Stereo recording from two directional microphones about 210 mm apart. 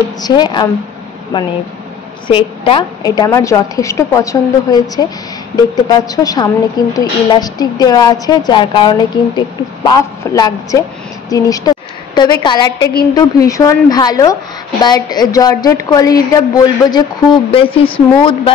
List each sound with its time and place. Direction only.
0.2 s a woman's voice: 20° left (ahead or behind)